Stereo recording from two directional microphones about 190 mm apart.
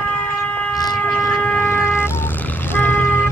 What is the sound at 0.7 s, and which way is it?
Siren, 20° left (ahead or behind).